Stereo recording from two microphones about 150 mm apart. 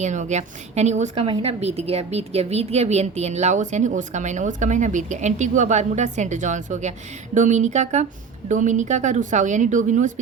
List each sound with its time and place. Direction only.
0.0 s a woman's voice: 50° right (ahead or behind)
1.1 s a woman's voice: 40° right (ahead or behind); by 10.1 s 55° right (ahead or behind)